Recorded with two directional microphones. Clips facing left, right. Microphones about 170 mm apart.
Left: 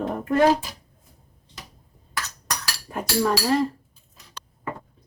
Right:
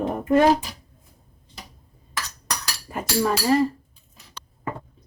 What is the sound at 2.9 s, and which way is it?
Speech, 5° right (ahead or behind).